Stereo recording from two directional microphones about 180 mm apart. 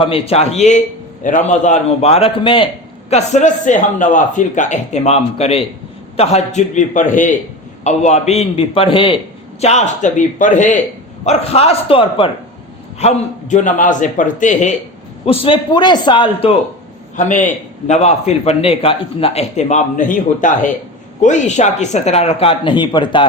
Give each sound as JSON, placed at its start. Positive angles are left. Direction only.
{"t": 0.0, "sound": "a man's voice", "side_deg": 30}
{"t": 3.1, "sound": "a man's voice", "side_deg": 40}
{"t": 15.3, "sound": "a man's voice", "side_deg": 30}
{"t": 17.2, "sound": "a man's voice", "side_deg": 45}